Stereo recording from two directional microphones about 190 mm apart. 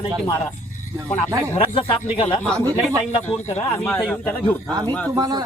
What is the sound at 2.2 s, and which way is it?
Speech, 10° left (ahead or behind).